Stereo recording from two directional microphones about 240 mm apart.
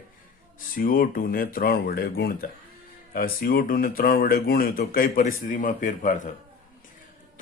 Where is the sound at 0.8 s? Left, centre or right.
Left.